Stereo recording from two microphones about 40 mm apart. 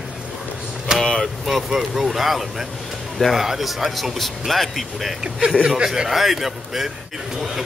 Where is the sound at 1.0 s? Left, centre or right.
Centre.